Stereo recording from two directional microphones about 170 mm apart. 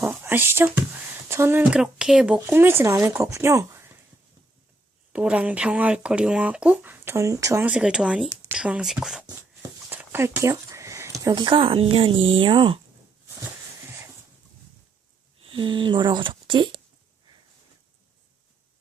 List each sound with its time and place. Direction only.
0.0 s a sound: 15° right (ahead or behind)
1.3 s speech: 15° right (ahead or behind)
5.1 s speech: 5° right (ahead or behind); by 12.8 s 30° right (ahead or behind)
15.4 s speech: 30° right (ahead or behind)